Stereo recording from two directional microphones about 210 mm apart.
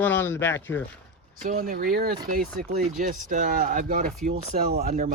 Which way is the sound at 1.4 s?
40° right (ahead or behind).